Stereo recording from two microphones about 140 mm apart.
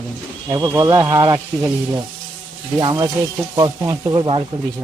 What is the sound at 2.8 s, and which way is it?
Speech, 30° right (ahead or behind).